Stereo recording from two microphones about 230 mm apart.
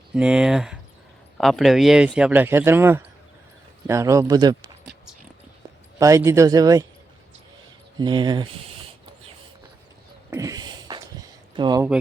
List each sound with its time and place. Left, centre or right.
0.1 s speech: centre
6.0 s speech: centre
7.9 s speech: centre
10.2 s a sound: centre
11.5 s speech: centre